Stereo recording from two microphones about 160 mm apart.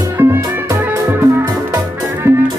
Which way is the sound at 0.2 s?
15° right (ahead or behind).